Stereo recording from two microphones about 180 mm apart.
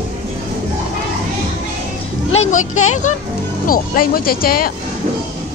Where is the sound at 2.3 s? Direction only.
40° left (ahead or behind).